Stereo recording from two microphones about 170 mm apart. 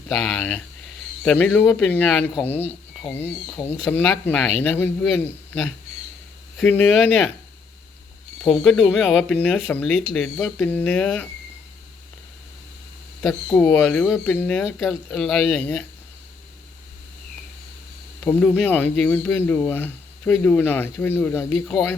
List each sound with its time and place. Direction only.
0.1 s speech: centre (ahead or behind)
3.1 s speech: 10° left (ahead or behind)
6.6 s speech: 5° left (ahead or behind)
8.4 s speech: centre (ahead or behind)
13.5 s speech: 10° left (ahead or behind)
18.2 s speech: 10° left (ahead or behind)
21.7 s speech: centre (ahead or behind)